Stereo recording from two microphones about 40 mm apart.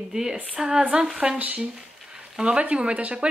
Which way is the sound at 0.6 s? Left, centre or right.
Right.